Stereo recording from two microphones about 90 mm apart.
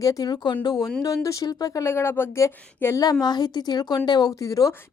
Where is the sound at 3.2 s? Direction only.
50° left (ahead or behind).